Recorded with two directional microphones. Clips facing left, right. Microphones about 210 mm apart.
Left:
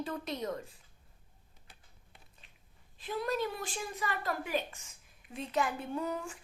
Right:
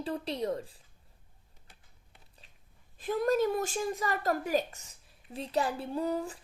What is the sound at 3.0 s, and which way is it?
A woman's voice, 45° right (ahead or behind).